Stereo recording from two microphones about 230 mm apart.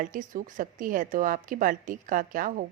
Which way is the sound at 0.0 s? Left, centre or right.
Right.